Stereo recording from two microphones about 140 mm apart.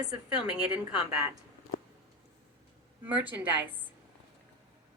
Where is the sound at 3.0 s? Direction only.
15° right (ahead or behind).